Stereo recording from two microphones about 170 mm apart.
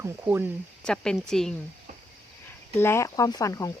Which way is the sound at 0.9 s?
5° left (ahead or behind).